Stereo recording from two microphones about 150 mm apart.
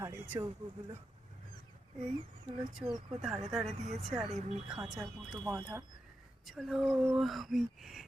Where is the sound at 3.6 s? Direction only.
45° right (ahead or behind).